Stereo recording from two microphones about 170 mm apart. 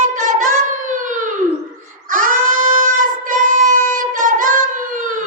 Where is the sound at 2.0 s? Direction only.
50° right (ahead or behind).